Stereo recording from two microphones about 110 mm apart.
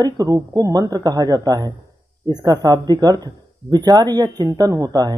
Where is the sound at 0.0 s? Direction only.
30° right (ahead or behind).